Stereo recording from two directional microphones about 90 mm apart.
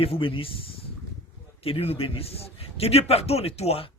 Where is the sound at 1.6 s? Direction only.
90° left.